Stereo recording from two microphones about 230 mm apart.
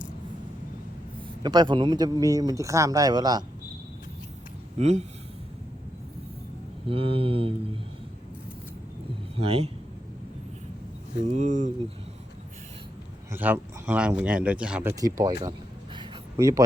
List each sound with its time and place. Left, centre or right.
1.4 s speech: centre
4.8 s speech: right
6.8 s speech: right
9.4 s speech: right
11.3 s speech: right
13.3 s speech: centre
16.0 s a sound: centre